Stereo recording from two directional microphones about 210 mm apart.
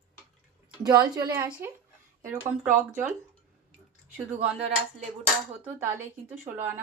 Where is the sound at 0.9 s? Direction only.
20° right (ahead or behind).